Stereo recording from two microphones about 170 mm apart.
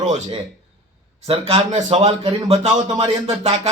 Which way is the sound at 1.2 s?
35° right (ahead or behind).